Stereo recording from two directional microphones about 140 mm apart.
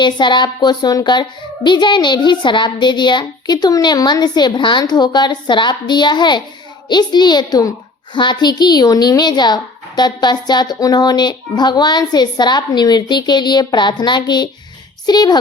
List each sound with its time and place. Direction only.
0.0 s a child's voice: 35° left (ahead or behind)